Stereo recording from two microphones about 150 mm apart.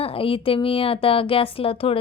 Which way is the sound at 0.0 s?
40° left (ahead or behind).